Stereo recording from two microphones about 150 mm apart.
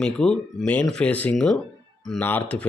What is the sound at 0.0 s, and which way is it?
Speech, 5° left (ahead or behind).